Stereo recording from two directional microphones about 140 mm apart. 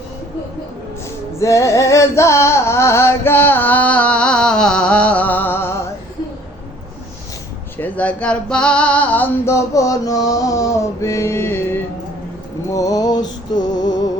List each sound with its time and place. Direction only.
1.4 s music: 20° left (ahead or behind)
7.8 s female singing: 10° left (ahead or behind)
12.7 s music: 25° left (ahead or behind)